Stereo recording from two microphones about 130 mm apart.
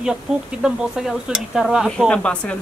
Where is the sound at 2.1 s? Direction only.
10° left (ahead or behind).